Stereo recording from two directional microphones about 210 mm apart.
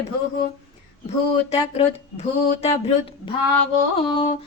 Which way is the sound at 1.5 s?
30° left (ahead or behind).